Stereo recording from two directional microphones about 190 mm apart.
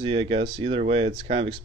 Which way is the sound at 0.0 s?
30° right (ahead or behind).